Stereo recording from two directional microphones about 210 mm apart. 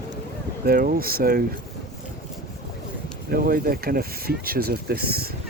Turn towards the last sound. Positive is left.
turn(degrees=-45)  # may be behind; listen again after turning